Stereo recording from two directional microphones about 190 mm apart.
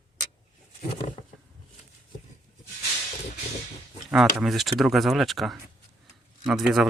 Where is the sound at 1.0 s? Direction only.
40° left (ahead or behind).